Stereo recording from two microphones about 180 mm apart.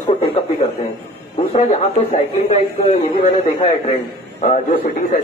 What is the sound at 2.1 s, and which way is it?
A man's voice, 40° left (ahead or behind).